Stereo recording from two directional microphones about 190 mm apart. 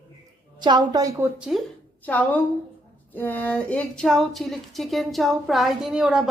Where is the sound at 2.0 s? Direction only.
10° left (ahead or behind).